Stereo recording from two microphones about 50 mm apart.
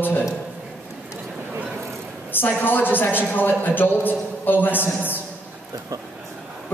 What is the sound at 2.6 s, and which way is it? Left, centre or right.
A man's voice, left.